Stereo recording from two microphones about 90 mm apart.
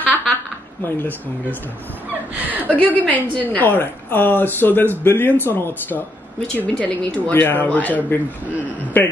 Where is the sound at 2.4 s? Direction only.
20° right (ahead or behind).